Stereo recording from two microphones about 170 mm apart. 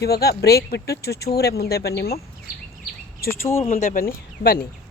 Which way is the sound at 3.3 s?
15° left (ahead or behind).